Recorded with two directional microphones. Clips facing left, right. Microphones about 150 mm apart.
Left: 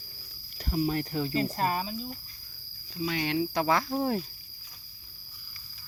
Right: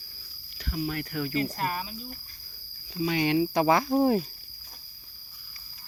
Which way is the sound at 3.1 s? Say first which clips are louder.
Right 5 dB; 15° right (ahead or behind).